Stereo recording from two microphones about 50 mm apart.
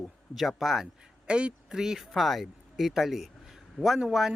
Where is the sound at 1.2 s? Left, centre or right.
Right.